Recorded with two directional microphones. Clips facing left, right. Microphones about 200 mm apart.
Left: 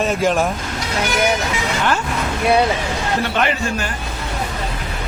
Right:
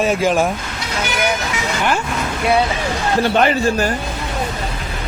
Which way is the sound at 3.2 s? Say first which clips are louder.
Right 8 dB; 35° right (ahead or behind).